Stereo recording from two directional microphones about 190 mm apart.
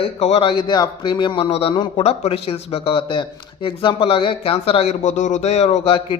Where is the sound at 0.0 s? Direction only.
30° left (ahead or behind).